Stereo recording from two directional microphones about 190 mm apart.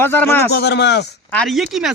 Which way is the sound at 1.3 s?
Centre (ahead or behind).